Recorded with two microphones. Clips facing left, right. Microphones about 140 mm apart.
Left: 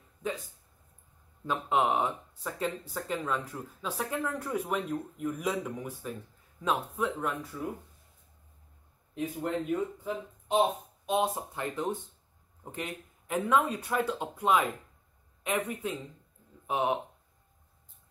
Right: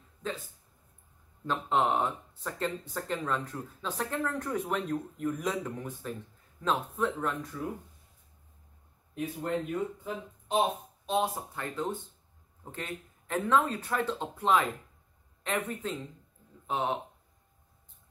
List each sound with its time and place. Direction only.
1.5 s speech: 10° left (ahead or behind)
9.2 s speech: 15° left (ahead or behind)